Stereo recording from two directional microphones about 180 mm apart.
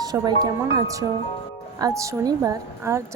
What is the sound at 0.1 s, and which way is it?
A woman's voice, 15° right (ahead or behind).